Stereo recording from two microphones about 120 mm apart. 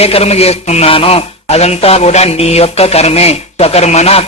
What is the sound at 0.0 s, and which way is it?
Speech, 60° left (ahead or behind).